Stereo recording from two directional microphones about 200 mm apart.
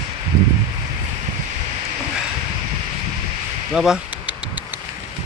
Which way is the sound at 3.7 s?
Centre (ahead or behind).